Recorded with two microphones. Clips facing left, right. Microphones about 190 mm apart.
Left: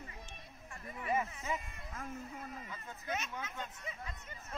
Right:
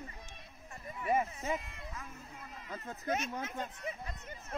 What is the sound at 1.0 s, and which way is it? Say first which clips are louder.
Speech: right 4 dB; 40° right (ahead or behind).